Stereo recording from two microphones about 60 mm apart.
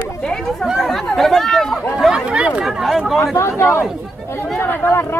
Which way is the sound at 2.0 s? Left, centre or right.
Centre.